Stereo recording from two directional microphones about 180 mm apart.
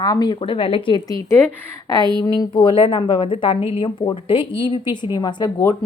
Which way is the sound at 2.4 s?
25° left (ahead or behind).